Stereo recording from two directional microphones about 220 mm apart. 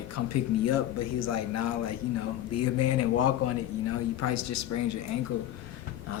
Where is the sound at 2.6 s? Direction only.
90° left.